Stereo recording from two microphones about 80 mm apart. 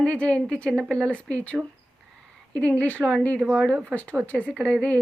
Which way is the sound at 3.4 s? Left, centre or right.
Right.